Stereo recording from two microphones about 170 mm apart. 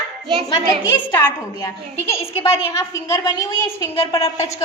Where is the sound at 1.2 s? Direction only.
15° left (ahead or behind).